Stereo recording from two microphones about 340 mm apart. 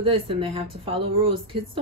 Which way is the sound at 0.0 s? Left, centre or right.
Centre.